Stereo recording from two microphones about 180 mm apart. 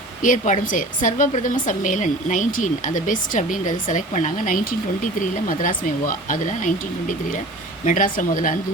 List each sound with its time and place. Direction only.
0.2 s speech: 45° left (ahead or behind)